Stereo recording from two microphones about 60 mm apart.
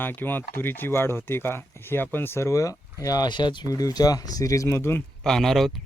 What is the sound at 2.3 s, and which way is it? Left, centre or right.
Speech, left.